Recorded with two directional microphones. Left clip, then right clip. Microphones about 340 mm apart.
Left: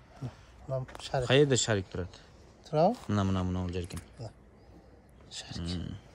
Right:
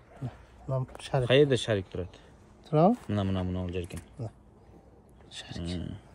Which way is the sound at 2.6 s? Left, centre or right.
Centre.